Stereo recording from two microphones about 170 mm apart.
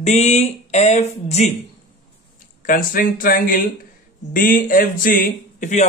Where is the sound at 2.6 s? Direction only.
55° left (ahead or behind).